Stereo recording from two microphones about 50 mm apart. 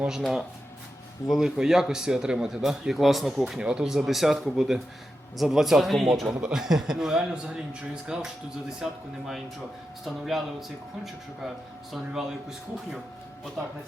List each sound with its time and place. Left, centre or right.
0.2 s speech: centre
3.4 s speech: centre
11.0 s speech: centre